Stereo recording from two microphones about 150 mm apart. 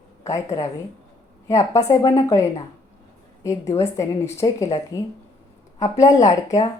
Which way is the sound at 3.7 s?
20° left (ahead or behind).